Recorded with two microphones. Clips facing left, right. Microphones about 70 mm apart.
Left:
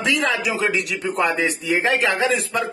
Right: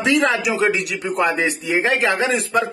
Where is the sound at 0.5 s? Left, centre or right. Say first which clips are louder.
Right 3 dB; right.